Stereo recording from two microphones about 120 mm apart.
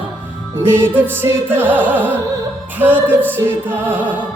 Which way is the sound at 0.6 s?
20° right (ahead or behind).